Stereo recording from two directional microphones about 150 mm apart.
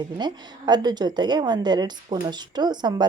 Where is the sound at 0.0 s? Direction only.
30° right (ahead or behind).